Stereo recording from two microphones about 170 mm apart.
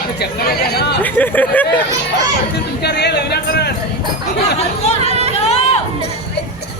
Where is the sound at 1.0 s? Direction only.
10° left (ahead or behind).